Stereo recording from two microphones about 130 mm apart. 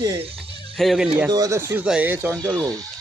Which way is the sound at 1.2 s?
30° right (ahead or behind).